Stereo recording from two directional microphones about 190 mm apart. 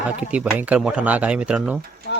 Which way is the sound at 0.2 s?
5° right (ahead or behind).